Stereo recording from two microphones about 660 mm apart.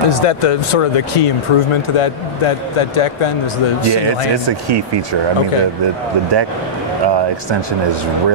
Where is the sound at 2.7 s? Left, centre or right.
Left.